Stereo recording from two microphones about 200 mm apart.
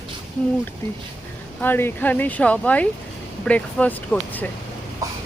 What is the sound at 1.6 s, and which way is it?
Speech, 10° left (ahead or behind).